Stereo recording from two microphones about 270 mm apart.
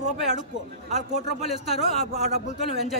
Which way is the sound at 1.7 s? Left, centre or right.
Left.